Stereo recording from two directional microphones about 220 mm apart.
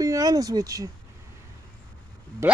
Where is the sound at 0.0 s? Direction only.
15° right (ahead or behind).